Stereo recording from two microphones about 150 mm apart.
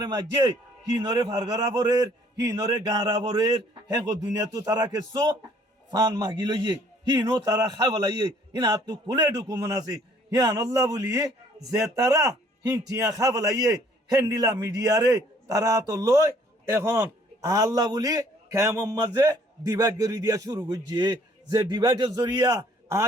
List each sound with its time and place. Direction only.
0.0 s a man's voice: 25° right (ahead or behind)